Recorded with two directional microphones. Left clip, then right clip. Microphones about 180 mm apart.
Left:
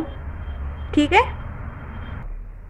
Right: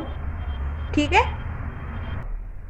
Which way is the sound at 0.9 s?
45° left (ahead or behind).